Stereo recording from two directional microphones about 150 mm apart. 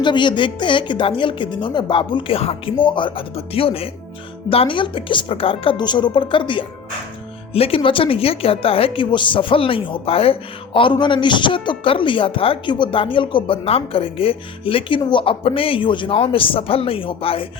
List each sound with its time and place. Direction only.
0.0 s a man's voice: 30° left (ahead or behind)